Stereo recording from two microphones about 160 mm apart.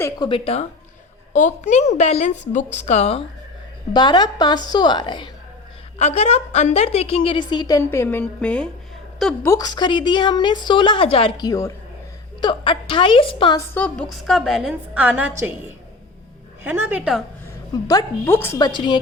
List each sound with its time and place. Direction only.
0.2 s a woman's voice: 35° left (ahead or behind)
1.3 s a woman's voice: 50° left (ahead or behind)
3.9 s a woman's voice: 25° left (ahead or behind)
6.0 s a woman's voice: 45° left (ahead or behind); by 7.9 s 25° left (ahead or behind)
7.9 s a woman's voice: 15° left (ahead or behind)
9.4 s a woman's voice: 20° left (ahead or behind)
13.7 s a woman's voice: 10° left (ahead or behind)
17.8 s a woman's voice: 20° left (ahead or behind)
18.6 s a woman's voice: 30° left (ahead or behind)